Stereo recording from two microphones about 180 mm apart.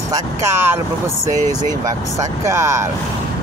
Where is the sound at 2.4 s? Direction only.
15° right (ahead or behind).